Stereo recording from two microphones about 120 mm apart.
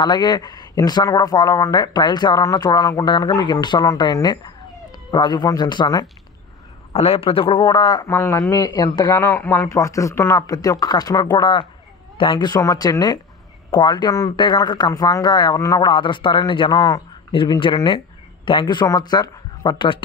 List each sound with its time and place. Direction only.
0.0 s speech: 35° left (ahead or behind)
6.9 s a man's voice: 55° left (ahead or behind); by 8.1 s 35° left (ahead or behind)
8.1 s speech: 25° left (ahead or behind)
9.1 s speech: 20° left (ahead or behind)
15.9 s a man's voice: 45° left (ahead or behind)